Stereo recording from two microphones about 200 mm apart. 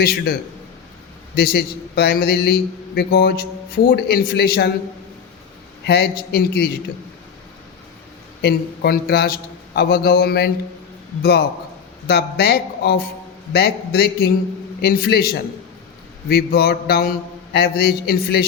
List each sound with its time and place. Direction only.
0.0 s a man's voice: 50° left (ahead or behind)
1.4 s a man's voice: 50° left (ahead or behind)
5.8 s a man's voice: 55° left (ahead or behind)
8.4 s a man's voice: 50° left (ahead or behind)